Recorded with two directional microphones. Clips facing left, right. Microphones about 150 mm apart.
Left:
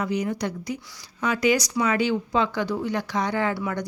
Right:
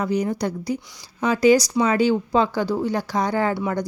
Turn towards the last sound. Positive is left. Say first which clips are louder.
# right 3 dB
turn(degrees=-30)  # may be behind; listen again after turning